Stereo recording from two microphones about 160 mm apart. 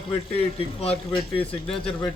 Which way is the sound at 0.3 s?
40° left (ahead or behind).